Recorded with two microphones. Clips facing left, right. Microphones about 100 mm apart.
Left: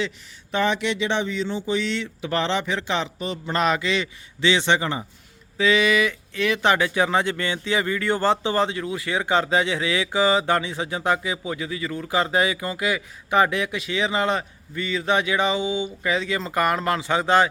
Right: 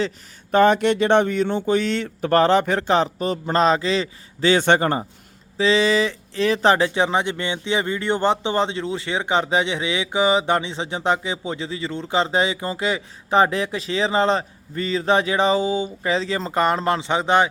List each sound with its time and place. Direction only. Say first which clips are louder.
0.5 s speech: right 7 dB; 45° right (ahead or behind)
5.5 s speech: right 2 dB; 30° right (ahead or behind)